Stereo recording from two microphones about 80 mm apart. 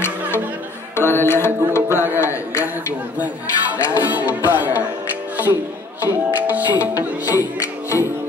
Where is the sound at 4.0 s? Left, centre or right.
Right.